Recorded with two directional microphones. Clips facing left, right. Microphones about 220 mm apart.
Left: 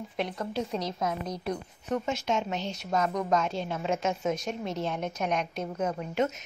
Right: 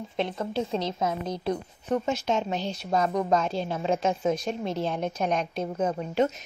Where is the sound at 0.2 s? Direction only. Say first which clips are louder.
Right 3 dB; 25° right (ahead or behind).